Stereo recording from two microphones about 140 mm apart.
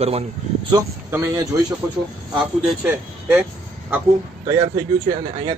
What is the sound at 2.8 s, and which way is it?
Speech, 10° right (ahead or behind).